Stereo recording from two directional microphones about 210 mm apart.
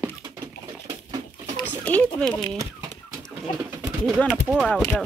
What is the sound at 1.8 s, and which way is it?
Speech, 5° left (ahead or behind).